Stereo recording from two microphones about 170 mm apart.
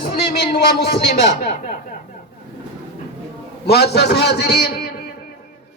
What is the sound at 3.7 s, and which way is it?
Speech, 70° left (ahead or behind).